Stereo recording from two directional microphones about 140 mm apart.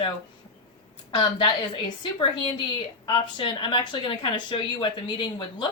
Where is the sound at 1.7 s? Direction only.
35° left (ahead or behind).